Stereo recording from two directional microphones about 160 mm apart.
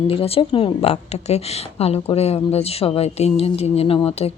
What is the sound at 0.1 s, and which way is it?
A woman's voice, 35° left (ahead or behind).